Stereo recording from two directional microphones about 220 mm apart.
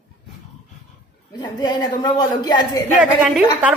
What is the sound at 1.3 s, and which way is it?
A woman's voice, 20° left (ahead or behind).